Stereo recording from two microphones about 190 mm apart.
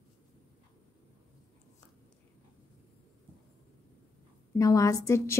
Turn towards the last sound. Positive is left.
turn(degrees=15)  # may be behind; listen again after turning